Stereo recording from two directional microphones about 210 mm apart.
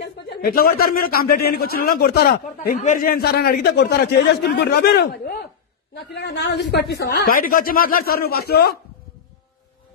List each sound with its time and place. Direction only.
0.0 s a man's voice: 45° left (ahead or behind)